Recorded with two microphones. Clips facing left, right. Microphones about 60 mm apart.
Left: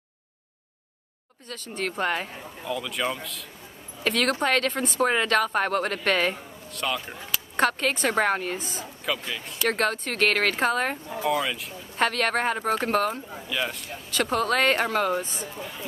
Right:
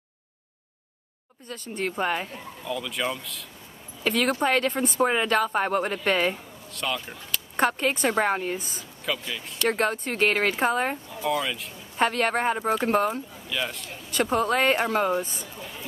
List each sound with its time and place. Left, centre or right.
1.5 s a woman's voice: centre
2.6 s a woman's voice: centre
6.7 s a woman's voice: centre
8.5 s a woman's voice: left
9.3 s speech: centre
9.7 s a woman's voice: centre
11.2 s speech: centre
12.0 s a woman's voice: centre
13.5 s speech: centre
14.2 s speech: right
15.4 s speech: left